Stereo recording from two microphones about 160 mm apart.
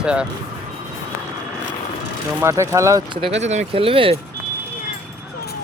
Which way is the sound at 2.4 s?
20° right (ahead or behind).